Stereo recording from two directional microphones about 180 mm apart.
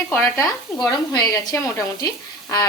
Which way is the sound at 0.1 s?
15° left (ahead or behind).